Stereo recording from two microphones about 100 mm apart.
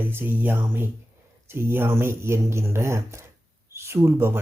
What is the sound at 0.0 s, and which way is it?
Speech, 20° right (ahead or behind).